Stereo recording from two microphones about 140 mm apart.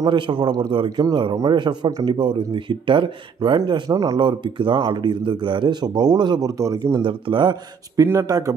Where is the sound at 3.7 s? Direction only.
25° right (ahead or behind).